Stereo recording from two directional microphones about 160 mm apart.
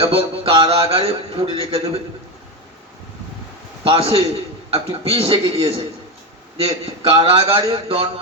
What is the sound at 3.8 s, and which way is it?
A man's voice, 35° right (ahead or behind).